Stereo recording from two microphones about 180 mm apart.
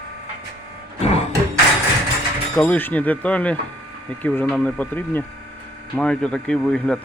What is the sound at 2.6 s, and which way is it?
Speech, 10° left (ahead or behind).